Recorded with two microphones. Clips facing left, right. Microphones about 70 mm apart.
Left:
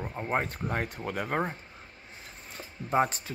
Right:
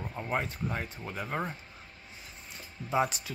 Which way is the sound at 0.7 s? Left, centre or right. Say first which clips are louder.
Left 5 dB; left.